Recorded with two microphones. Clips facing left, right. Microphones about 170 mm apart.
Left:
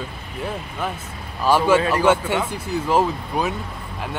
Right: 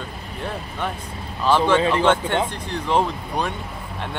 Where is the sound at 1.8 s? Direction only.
25° right (ahead or behind).